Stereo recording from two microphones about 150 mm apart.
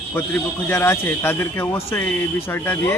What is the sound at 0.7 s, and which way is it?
A man's voice, 15° left (ahead or behind).